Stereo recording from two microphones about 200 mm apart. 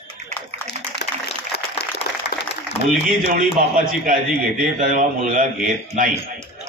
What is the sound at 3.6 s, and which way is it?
Speech, 40° right (ahead or behind).